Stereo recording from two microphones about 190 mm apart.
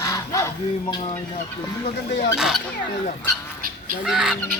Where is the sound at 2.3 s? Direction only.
Centre (ahead or behind).